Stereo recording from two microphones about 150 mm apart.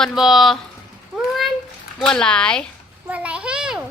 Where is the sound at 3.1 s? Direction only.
10° right (ahead or behind).